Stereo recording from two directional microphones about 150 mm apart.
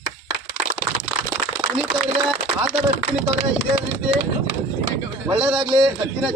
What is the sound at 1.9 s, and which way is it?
Speech, 25° right (ahead or behind).